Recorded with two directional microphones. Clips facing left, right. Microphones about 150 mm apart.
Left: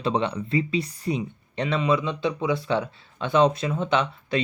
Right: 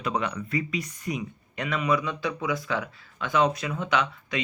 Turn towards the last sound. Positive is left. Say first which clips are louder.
# left 3 dB
turn(degrees=30)  # may be behind; listen again after turning